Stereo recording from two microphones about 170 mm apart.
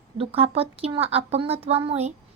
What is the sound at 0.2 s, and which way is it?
A child's voice, 35° right (ahead or behind).